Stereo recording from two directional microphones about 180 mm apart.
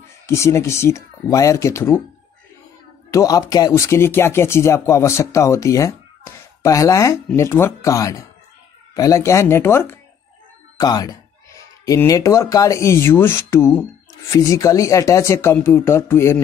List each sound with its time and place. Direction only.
0.3 s speech: 15° left (ahead or behind)
3.1 s speech: 20° left (ahead or behind)